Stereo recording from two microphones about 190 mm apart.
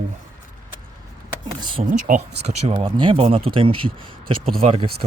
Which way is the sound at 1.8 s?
40° right (ahead or behind).